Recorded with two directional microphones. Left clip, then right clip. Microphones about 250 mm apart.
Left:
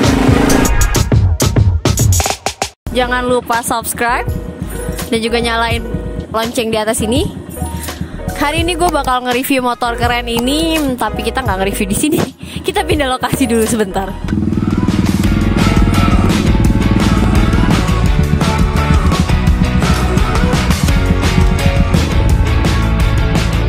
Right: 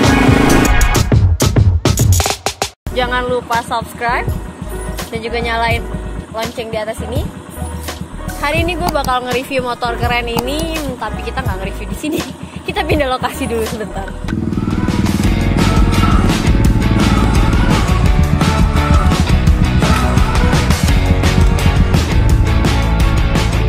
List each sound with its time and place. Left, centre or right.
0.0 s music: centre
2.9 s music: left
3.7 s speech: left
8.4 s speech: left
14.7 s music: centre